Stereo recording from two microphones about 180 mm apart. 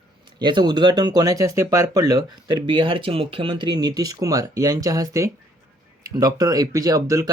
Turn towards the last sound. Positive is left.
turn(degrees=-20)  # may be behind; listen again after turning